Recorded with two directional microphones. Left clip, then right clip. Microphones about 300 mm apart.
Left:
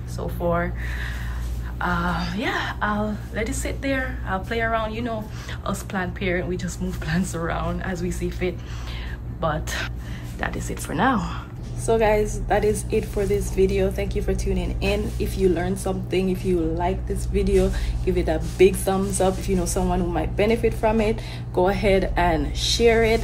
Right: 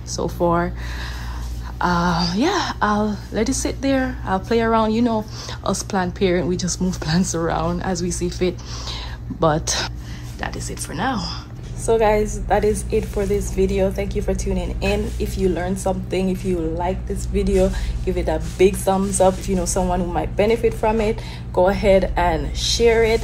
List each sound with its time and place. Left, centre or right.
0.1 s a woman's voice: centre
1.8 s a woman's voice: centre
10.4 s a woman's voice: centre